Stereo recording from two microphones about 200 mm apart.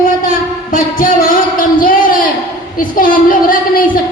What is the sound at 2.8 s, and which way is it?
Speech, 45° left (ahead or behind).